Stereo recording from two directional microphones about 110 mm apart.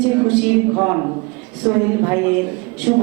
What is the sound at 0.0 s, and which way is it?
A man's voice, 10° right (ahead or behind).